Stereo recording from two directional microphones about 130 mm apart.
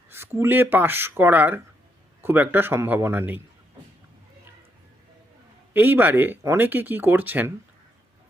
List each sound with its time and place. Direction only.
0.1 s speech: 15° right (ahead or behind)
5.7 s speech: 15° right (ahead or behind)